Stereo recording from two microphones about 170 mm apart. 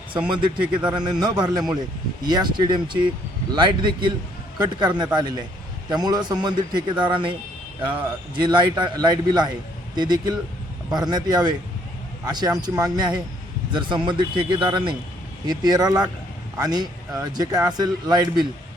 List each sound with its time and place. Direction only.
0.8 s a man's voice: 25° right (ahead or behind)